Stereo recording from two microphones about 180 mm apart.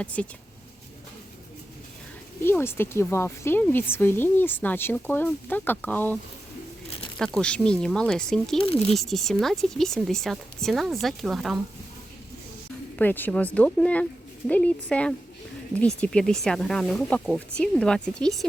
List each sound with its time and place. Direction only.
0.0 s speech: 5° left (ahead or behind)
2.4 s speech: 15° left (ahead or behind)
7.3 s speech: 5° left (ahead or behind)
8.5 s speech: 30° left (ahead or behind)
9.0 s speech: centre (ahead or behind)
13.0 s speech: 10° left (ahead or behind)